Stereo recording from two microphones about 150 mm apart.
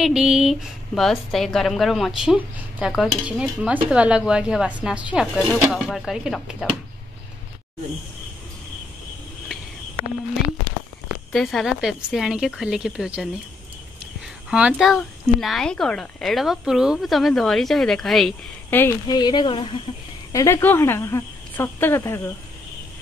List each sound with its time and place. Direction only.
0.0 s a woman's voice: 5° right (ahead or behind)
11.3 s a woman's voice: centre (ahead or behind)
14.5 s a woman's voice: 5° right (ahead or behind)
18.7 s speech: 15° left (ahead or behind)
19.0 s speech: 30° left (ahead or behind)
20.3 s a woman's voice: 20° left (ahead or behind)